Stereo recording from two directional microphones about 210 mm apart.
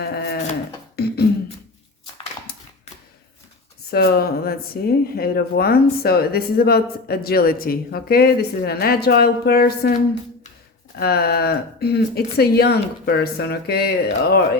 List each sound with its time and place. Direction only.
0.0 s wood: 50° left (ahead or behind)
0.9 s beatboxing: 50° left (ahead or behind)
2.5 s a sound: 50° left (ahead or behind)
3.9 s speech: 50° left (ahead or behind)
10.9 s speech: 50° left (ahead or behind)